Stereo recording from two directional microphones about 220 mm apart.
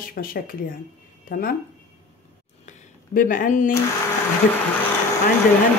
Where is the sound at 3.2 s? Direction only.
35° left (ahead or behind).